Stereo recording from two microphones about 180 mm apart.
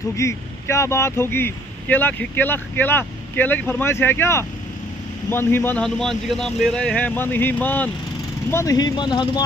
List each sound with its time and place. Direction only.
0.1 s speech: 15° left (ahead or behind)